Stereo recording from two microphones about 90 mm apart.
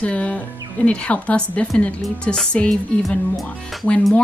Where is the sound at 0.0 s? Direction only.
15° left (ahead or behind).